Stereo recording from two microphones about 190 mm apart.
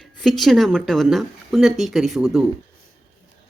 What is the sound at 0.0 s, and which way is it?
Speech, centre (ahead or behind).